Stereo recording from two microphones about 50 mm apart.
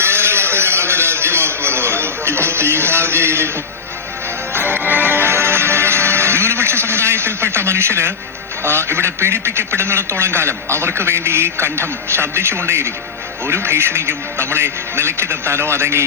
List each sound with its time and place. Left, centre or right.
0.0 s a sound: right
4.5 s music: right
8.6 s a man's voice: right